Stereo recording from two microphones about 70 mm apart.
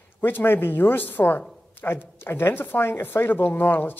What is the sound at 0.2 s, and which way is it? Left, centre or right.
Speech, left.